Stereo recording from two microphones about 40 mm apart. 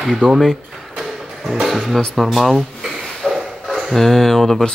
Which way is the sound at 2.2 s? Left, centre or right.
Centre.